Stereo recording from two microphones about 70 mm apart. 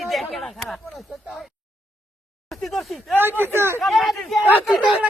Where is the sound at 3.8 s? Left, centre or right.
Centre.